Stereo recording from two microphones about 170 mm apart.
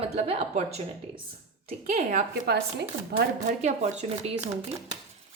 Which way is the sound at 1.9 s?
50° right (ahead or behind).